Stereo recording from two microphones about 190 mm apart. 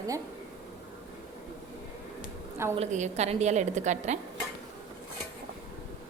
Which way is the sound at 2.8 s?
35° right (ahead or behind).